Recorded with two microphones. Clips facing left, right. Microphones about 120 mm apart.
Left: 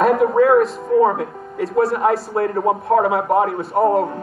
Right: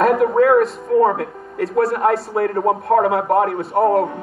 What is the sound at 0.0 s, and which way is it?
Speech, centre (ahead or behind).